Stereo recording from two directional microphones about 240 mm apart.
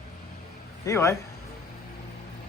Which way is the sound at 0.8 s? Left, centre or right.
Centre.